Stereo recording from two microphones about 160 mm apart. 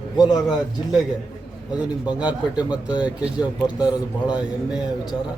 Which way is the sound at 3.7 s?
25° left (ahead or behind).